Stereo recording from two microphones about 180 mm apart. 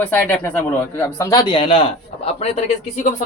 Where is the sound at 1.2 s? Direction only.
20° left (ahead or behind); by 3.2 s 40° left (ahead or behind).